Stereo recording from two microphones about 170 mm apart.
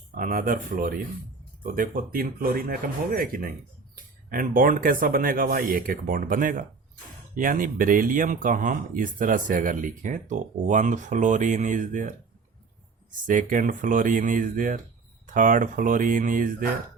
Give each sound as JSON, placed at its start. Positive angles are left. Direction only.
{"t": 0.1, "sound": "speech", "side_deg": -55}